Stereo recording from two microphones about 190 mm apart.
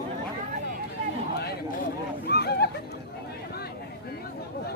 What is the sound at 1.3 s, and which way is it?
Speech, 55° left (ahead or behind).